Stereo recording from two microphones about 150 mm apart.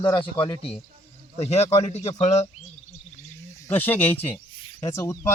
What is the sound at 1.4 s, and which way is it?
Speech, 45° left (ahead or behind).